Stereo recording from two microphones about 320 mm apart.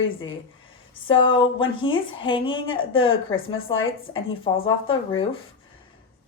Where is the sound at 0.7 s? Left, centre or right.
Centre.